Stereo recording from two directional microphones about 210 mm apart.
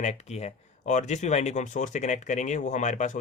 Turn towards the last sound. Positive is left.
turn(degrees=35)  # may be behind; listen again after turning